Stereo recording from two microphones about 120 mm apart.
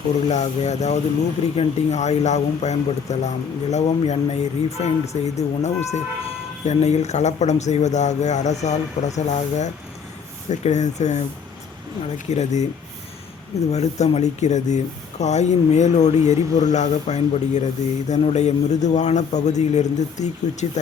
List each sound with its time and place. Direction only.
0.3 s speech: 70° left (ahead or behind)
13.7 s speech: 70° left (ahead or behind)